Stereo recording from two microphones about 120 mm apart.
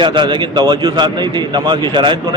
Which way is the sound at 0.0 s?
40° right (ahead or behind).